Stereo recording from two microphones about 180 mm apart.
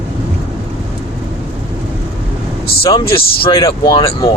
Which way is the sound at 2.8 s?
30° left (ahead or behind).